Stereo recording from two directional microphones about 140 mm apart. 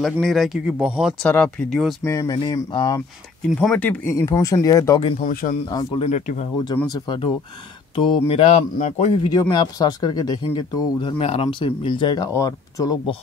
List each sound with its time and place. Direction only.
0.0 s speech: centre (ahead or behind)
1.2 s speech: 10° left (ahead or behind)
2.0 s speech: 25° left (ahead or behind)
2.3 s speech: 35° left (ahead or behind)
3.5 s speech: 10° left (ahead or behind)
4.1 s speech: 25° left (ahead or behind)
5.2 s speech: 80° left
5.9 s speech: 60° left (ahead or behind)
6.9 s speech: 35° left (ahead or behind)
7.9 s speech: 45° left (ahead or behind)
9.3 s speech: 25° left (ahead or behind)
12.3 s speech: 25° left (ahead or behind)